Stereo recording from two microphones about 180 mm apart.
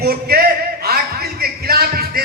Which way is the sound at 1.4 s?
60° right (ahead or behind).